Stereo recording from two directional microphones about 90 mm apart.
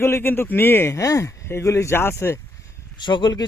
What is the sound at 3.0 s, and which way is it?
Speech, 55° left (ahead or behind).